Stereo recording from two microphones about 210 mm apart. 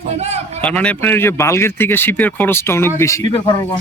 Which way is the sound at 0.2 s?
30° right (ahead or behind).